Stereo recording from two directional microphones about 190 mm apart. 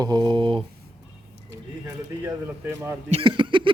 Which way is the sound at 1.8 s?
15° right (ahead or behind).